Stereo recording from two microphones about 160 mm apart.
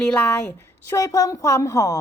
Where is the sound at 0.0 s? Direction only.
10° left (ahead or behind).